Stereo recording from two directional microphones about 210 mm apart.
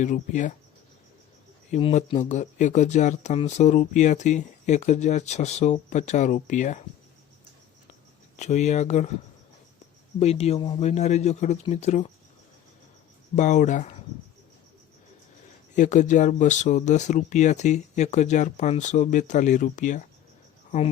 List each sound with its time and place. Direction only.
0.0 s speech: 35° left (ahead or behind)
1.7 s speech: 35° left (ahead or behind)
8.4 s speech: 35° left (ahead or behind)
10.2 s speech: 30° left (ahead or behind)
13.3 s speech: 35° left (ahead or behind)
15.7 s speech: 35° left (ahead or behind)